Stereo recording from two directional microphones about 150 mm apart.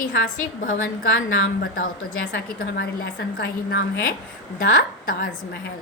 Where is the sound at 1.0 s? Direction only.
75° left (ahead or behind).